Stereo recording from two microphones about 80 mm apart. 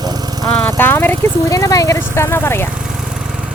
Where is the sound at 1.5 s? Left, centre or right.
Left.